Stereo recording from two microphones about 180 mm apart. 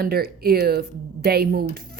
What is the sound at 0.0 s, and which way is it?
Speech, 60° right (ahead or behind).